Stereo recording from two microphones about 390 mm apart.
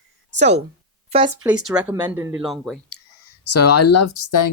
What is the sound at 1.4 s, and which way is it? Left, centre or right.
Speech, centre.